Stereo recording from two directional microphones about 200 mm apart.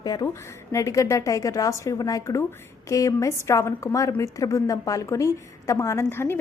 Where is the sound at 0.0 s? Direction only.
20° left (ahead or behind).